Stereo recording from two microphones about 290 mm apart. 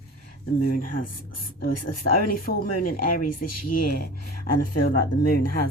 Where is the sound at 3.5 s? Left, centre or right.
Left.